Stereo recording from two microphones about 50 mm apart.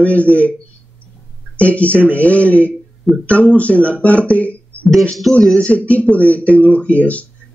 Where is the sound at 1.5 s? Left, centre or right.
Left.